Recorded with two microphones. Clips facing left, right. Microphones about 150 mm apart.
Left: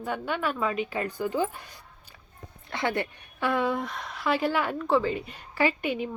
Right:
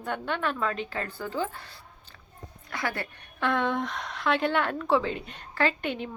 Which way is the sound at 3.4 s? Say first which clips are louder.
Even; 5° left (ahead or behind).